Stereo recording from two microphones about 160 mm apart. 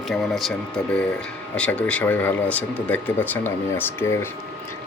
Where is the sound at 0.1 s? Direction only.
Centre (ahead or behind).